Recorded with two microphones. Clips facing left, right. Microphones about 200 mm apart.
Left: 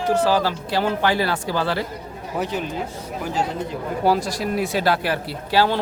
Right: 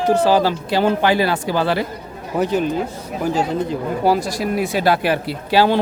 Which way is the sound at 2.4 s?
45° right (ahead or behind).